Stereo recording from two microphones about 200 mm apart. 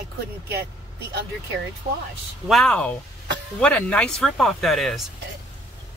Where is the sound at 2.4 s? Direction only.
Centre (ahead or behind).